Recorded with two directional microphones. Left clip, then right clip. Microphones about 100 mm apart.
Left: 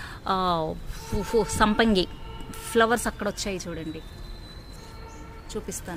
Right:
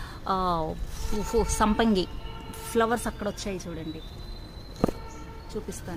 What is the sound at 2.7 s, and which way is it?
Speech, 30° left (ahead or behind).